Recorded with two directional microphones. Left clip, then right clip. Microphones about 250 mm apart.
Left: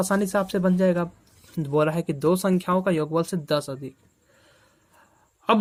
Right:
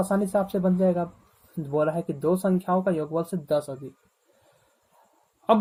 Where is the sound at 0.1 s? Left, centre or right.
Left.